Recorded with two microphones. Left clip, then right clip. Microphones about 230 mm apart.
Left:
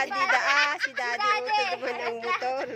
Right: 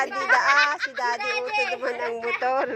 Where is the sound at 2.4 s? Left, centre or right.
Centre.